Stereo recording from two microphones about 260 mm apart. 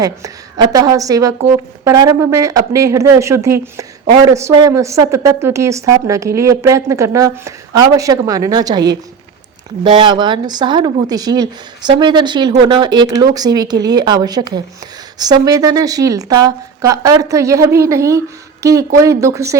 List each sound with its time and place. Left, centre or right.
0.0 s a woman's voice: centre